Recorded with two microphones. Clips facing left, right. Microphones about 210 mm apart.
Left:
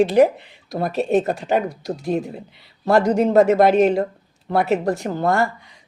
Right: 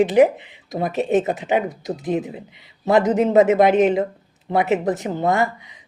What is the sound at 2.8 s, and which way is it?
Speech, 20° right (ahead or behind).